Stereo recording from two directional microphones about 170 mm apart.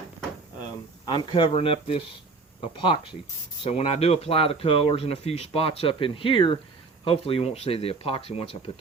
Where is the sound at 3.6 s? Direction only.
35° left (ahead or behind).